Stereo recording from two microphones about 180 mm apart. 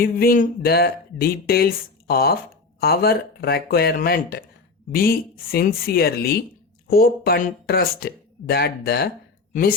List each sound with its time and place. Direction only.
0.0 s speech: 55° left (ahead or behind)